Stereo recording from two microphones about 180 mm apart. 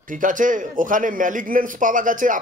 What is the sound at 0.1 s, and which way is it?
A man's voice, 45° right (ahead or behind).